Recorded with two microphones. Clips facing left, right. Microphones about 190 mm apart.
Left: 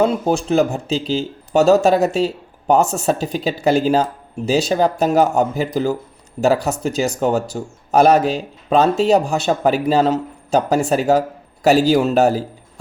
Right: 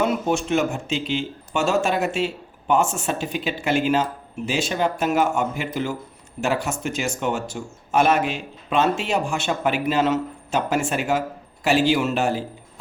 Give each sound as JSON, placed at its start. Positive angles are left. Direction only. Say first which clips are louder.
{"t": 0.0, "sound": "a man's voice", "louder": "left 5 dB", "side_deg": 35}